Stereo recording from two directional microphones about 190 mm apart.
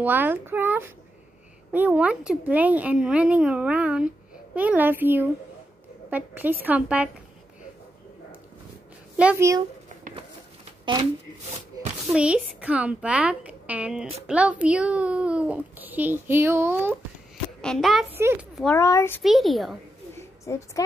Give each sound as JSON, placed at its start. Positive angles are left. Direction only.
{"t": 0.0, "sound": "a child's voice", "side_deg": -10}
{"t": 9.1, "sound": "a child's voice", "side_deg": -10}
{"t": 12.1, "sound": "a child's voice", "side_deg": -5}
{"t": 17.6, "sound": "a woman's voice", "side_deg": 0}
{"t": 18.1, "sound": "a child's voice", "side_deg": -10}
{"t": 18.8, "sound": "a child's voice", "side_deg": 15}
{"t": 19.2, "sound": "a child's voice", "side_deg": 0}
{"t": 20.2, "sound": "a sound", "side_deg": 15}